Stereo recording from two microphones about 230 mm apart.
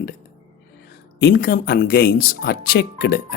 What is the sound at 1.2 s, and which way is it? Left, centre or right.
Speech, left.